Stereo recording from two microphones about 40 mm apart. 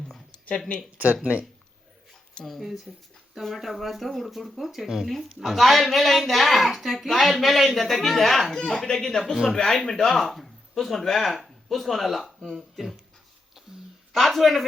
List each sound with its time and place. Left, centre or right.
0.9 s speech: right
2.6 s a man's voice: centre
9.3 s speech: centre
9.6 s speech: centre
14.1 s speech: centre